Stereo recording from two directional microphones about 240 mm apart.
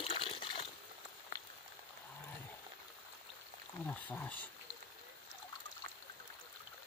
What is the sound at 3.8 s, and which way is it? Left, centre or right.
Speech, centre.